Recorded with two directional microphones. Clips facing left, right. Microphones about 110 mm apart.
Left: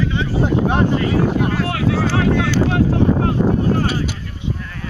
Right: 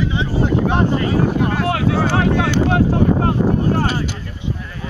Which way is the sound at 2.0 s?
50° right (ahead or behind).